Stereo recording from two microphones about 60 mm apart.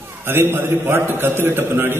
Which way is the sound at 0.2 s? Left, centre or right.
Right.